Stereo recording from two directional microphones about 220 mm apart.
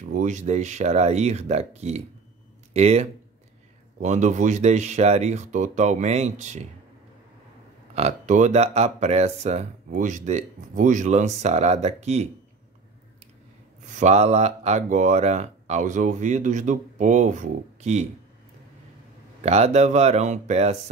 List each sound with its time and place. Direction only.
0.0 s speech: 35° right (ahead or behind)
7.9 s speech: 30° right (ahead or behind)
13.8 s speech: 30° right (ahead or behind)
19.4 s speech: 30° right (ahead or behind)